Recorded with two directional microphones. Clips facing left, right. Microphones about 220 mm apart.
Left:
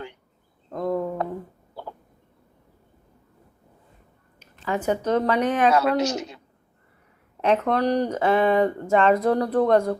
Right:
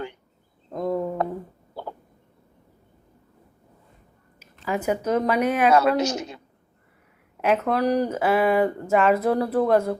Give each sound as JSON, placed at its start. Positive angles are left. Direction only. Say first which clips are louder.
{"t": 0.8, "sound": "a sound", "louder": "even", "side_deg": -5}
{"t": 4.4, "sound": "speech", "louder": "even", "side_deg": -10}
{"t": 6.0, "sound": "a man's voice", "louder": "even", "side_deg": -50}
{"t": 7.4, "sound": "speech", "louder": "even", "side_deg": -5}